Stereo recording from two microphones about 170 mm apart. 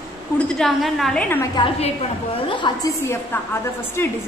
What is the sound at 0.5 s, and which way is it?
Speech, centre (ahead or behind).